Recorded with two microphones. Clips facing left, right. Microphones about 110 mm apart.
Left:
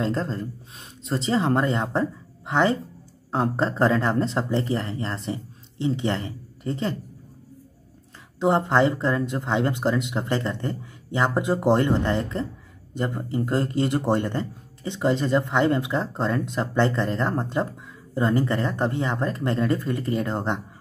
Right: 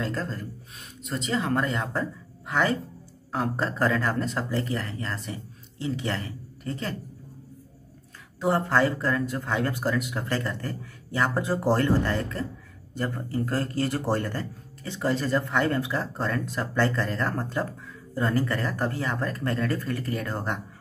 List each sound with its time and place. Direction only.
0.0 s a man's voice: 25° left (ahead or behind)
8.4 s a man's voice: 20° left (ahead or behind)